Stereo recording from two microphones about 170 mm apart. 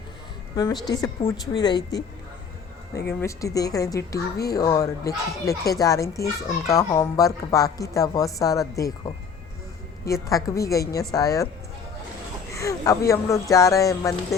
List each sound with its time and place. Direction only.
0.5 s a woman's voice: 20° left (ahead or behind)
3.1 s a woman's voice: 15° left (ahead or behind)
12.5 s a woman's voice: 20° left (ahead or behind)